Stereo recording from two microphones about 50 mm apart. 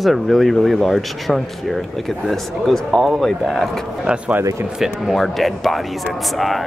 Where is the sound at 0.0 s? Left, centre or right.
Centre.